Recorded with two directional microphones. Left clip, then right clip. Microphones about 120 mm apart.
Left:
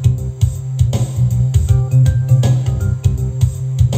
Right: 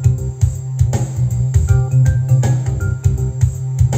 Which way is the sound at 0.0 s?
50° left (ahead or behind).